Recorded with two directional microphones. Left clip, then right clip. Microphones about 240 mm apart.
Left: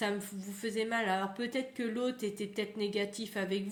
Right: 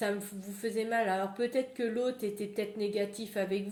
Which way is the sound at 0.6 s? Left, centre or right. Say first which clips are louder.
Right 2 dB; left.